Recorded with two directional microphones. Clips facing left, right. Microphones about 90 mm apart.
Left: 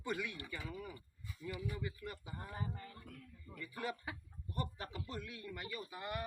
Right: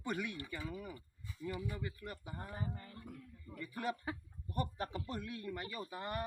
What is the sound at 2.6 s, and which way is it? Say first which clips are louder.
Speech: right 1 dB; 30° right (ahead or behind).